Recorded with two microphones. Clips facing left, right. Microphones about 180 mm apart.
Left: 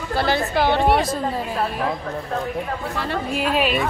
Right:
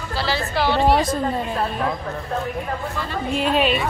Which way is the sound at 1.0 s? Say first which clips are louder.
Right 1 dB; centre (ahead or behind).